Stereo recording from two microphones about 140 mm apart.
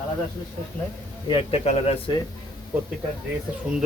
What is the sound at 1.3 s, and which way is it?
Speech, 45° left (ahead or behind).